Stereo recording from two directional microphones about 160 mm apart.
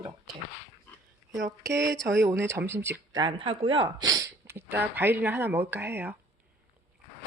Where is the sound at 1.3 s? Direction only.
20° right (ahead or behind).